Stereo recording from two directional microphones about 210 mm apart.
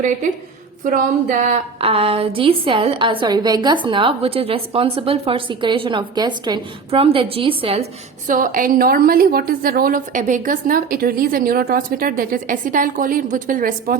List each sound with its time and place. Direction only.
0.9 s a woman's voice: 40° right (ahead or behind)
8.3 s a woman's voice: 40° right (ahead or behind)